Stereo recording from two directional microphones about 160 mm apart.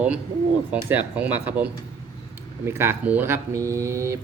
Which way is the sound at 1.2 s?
10° right (ahead or behind).